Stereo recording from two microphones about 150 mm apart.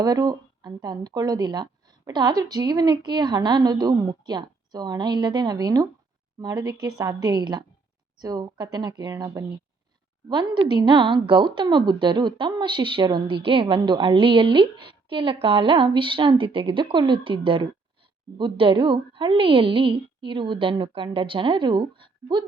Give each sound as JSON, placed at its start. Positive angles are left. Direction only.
{"t": 0.0, "sound": "a woman's voice", "side_deg": -25}